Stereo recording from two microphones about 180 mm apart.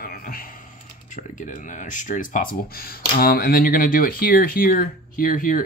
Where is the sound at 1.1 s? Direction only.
45° left (ahead or behind).